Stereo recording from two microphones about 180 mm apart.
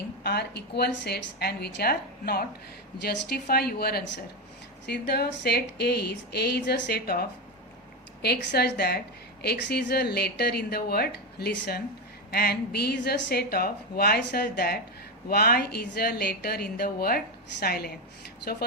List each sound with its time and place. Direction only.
0.2 s a woman's voice: 65° left (ahead or behind)